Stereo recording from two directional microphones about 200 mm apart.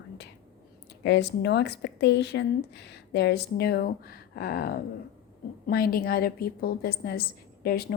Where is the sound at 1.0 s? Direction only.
60° left (ahead or behind).